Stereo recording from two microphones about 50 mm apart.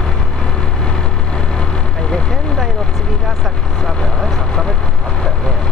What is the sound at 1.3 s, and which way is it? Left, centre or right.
Vehicle, centre.